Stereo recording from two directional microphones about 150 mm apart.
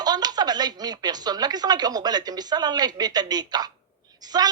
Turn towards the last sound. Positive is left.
turn(degrees=-25)  # may be behind; listen again after turning